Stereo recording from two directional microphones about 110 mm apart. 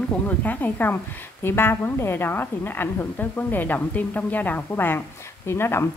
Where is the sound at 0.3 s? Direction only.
15° left (ahead or behind).